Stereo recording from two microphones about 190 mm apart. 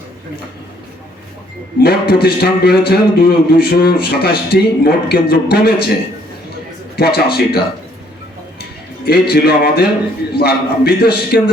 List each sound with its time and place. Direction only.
1.8 s a man's voice: 55° left (ahead or behind)
6.9 s a man's voice: 55° left (ahead or behind)
9.0 s a man's voice: 55° left (ahead or behind)